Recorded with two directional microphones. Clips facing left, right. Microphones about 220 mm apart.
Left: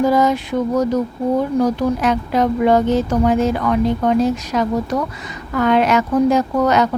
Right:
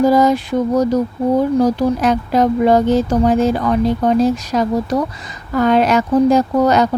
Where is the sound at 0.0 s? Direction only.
35° right (ahead or behind).